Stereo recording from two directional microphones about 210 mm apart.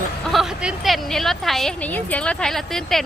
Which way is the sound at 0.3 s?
Centre (ahead or behind).